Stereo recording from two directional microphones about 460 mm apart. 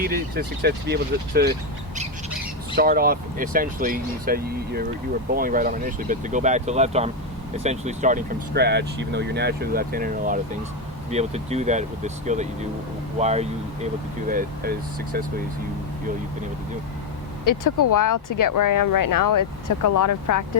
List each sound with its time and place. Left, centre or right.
0.0 s speech: centre
2.7 s speech: centre
17.4 s speech: left